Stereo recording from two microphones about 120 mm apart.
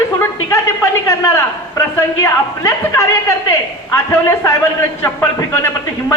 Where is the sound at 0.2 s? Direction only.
25° left (ahead or behind).